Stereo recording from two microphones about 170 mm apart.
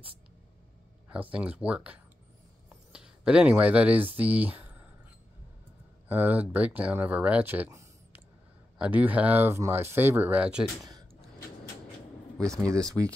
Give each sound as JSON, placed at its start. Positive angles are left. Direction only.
{"t": 1.1, "sound": "speech", "side_deg": -5}
{"t": 2.7, "sound": "a sound", "side_deg": -5}
{"t": 4.2, "sound": "speech", "side_deg": -10}
{"t": 6.0, "sound": "speech", "side_deg": -10}
{"t": 12.4, "sound": "speech", "side_deg": -20}